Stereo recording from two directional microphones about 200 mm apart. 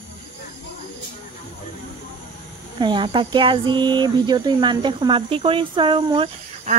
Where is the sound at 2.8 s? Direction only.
25° right (ahead or behind).